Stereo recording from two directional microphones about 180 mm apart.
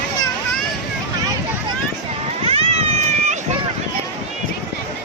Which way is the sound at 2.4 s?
35° right (ahead or behind).